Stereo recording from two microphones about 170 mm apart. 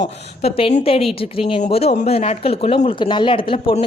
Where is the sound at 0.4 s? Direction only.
35° left (ahead or behind).